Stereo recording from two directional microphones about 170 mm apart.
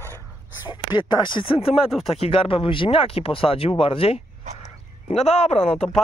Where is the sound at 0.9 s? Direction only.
25° left (ahead or behind).